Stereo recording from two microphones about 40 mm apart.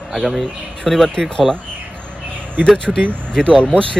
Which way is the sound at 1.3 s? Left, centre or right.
Centre.